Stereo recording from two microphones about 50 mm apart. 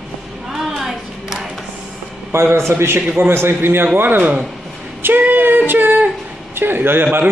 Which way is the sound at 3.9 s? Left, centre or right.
Right.